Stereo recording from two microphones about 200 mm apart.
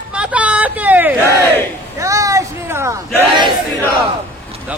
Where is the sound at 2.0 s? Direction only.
15° right (ahead or behind).